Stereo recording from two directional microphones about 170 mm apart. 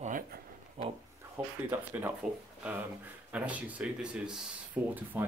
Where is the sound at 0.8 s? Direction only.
40° right (ahead or behind).